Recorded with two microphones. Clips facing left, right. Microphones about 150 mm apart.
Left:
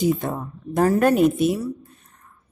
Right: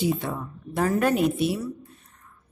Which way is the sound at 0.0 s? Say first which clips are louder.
Left 4 dB; 40° left (ahead or behind).